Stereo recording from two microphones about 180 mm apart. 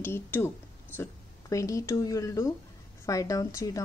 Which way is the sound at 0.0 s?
10° left (ahead or behind).